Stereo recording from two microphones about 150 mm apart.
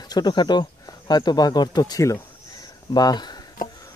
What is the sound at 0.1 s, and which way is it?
Speech, 30° left (ahead or behind).